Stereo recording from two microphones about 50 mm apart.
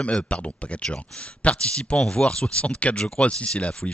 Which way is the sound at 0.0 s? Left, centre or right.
Left.